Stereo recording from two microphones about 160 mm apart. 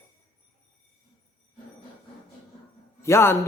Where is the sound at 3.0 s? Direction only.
15° left (ahead or behind).